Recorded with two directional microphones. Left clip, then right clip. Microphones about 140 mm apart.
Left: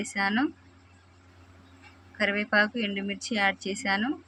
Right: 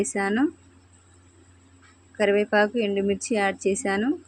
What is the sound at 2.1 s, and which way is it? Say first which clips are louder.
A woman's voice: right 4 dB; 25° right (ahead or behind).